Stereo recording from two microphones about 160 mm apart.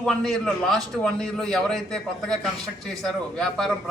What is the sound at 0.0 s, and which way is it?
A man's voice, 5° left (ahead or behind).